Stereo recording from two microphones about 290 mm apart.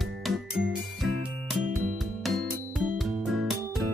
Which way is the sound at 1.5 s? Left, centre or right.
Centre.